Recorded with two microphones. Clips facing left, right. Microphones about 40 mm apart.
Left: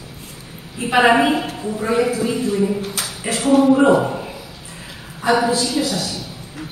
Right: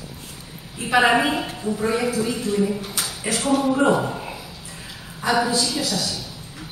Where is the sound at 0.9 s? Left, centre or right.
Centre.